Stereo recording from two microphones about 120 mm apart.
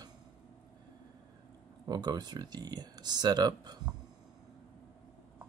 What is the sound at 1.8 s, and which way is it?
Speech, 35° right (ahead or behind).